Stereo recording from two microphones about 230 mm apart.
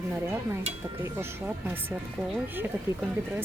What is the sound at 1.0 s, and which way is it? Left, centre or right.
Speech, centre.